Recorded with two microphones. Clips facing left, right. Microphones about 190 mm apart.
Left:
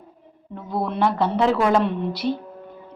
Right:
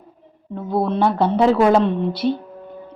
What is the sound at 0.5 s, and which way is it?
A woman's voice, 25° right (ahead or behind).